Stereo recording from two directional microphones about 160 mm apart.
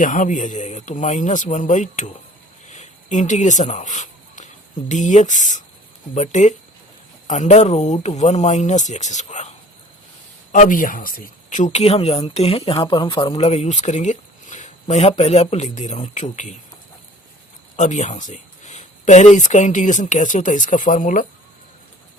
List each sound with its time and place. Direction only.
0.0 s speech: 55° left (ahead or behind)
2.6 s a sound: 50° left (ahead or behind)
4.9 s speech: 50° left (ahead or behind)
10.5 s speech: 55° left (ahead or behind)
17.7 s speech: 45° left (ahead or behind)